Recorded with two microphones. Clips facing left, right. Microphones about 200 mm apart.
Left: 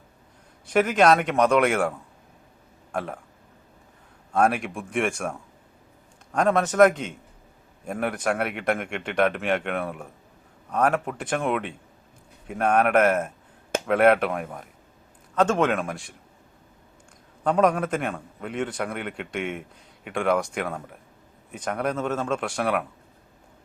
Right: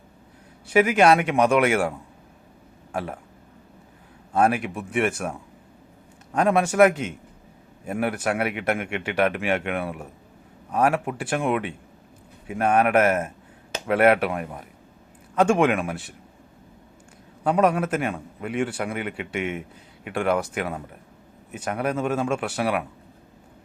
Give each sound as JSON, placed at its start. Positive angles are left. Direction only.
{"t": 0.7, "sound": "a man's voice", "side_deg": -10}
{"t": 4.3, "sound": "a man's voice", "side_deg": -5}
{"t": 17.4, "sound": "a man's voice", "side_deg": -5}